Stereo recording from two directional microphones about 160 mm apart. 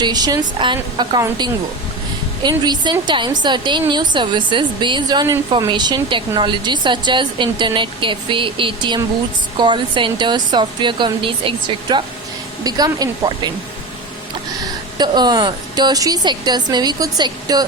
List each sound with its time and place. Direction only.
0.0 s a woman's voice: 25° right (ahead or behind)
2.4 s a woman's voice: 25° right (ahead or behind)
14.9 s a woman's voice: 25° right (ahead or behind)